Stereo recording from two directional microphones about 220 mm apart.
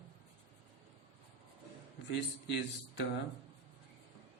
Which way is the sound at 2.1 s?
55° left (ahead or behind).